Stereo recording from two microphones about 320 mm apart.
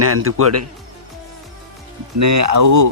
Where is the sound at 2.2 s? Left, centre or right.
Right.